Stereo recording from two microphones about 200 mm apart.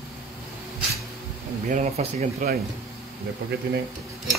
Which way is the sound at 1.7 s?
35° right (ahead or behind).